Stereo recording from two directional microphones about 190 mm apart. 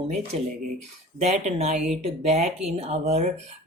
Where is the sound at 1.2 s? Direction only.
35° right (ahead or behind).